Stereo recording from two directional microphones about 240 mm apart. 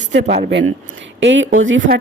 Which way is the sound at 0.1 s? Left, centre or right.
Right.